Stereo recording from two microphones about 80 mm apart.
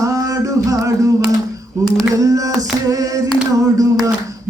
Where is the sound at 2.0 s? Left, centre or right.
Right.